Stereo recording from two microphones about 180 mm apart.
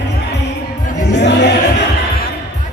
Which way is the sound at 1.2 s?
70° left (ahead or behind).